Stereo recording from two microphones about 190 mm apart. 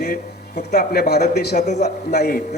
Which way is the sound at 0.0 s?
55° left (ahead or behind).